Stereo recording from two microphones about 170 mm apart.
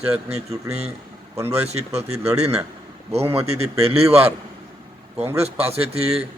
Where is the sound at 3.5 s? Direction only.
35° right (ahead or behind).